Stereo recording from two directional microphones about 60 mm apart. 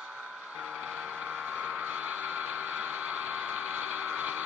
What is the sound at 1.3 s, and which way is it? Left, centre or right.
Vehicle, right.